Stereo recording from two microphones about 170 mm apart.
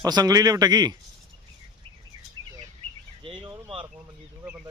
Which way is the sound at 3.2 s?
30° right (ahead or behind).